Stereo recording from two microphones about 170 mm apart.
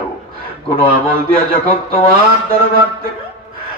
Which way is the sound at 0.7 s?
60° right (ahead or behind).